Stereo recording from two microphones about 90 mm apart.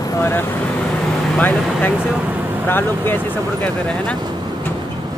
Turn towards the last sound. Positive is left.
turn(degrees=25)  # may be behind; listen again after turning